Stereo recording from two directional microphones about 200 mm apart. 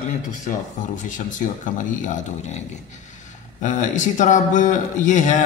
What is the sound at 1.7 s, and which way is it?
Speech, 40° left (ahead or behind).